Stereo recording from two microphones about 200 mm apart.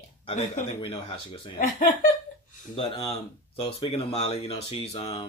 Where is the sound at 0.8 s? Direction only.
20° left (ahead or behind).